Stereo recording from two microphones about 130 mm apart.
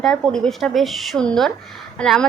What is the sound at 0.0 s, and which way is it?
Speech, 5° left (ahead or behind).